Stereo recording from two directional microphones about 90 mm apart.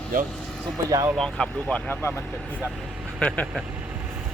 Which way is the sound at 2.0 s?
25° left (ahead or behind).